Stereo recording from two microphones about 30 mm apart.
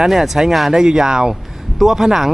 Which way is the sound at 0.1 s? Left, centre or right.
Centre.